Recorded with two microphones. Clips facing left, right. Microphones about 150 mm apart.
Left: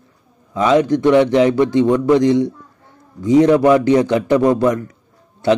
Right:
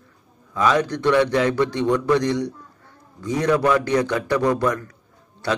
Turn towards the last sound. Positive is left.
turn(degrees=20)  # may be behind; listen again after turning